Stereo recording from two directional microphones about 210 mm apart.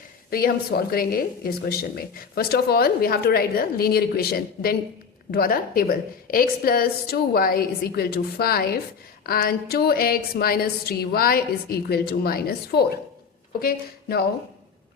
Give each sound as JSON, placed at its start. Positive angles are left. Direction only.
{"t": 0.3, "sound": "a woman's voice", "side_deg": 45}